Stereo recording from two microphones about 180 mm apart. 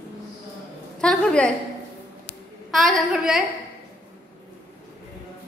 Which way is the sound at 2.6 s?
Centre (ahead or behind).